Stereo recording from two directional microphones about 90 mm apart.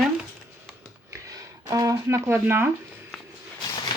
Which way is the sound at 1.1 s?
40° right (ahead or behind).